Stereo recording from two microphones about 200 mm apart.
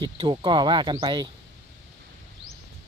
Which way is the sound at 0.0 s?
25° right (ahead or behind).